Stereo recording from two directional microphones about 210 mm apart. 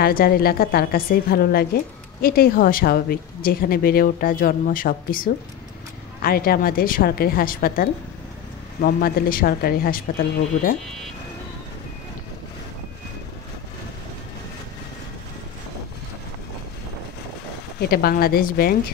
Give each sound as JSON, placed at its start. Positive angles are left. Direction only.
{"t": 0.0, "sound": "a woman's voice", "side_deg": 45}
{"t": 17.7, "sound": "a woman's voice", "side_deg": 45}